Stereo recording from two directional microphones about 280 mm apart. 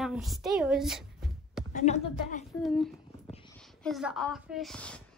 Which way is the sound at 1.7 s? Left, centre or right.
Left.